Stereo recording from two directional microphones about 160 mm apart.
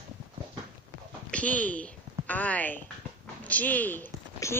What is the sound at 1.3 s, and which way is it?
Speech, 10° left (ahead or behind).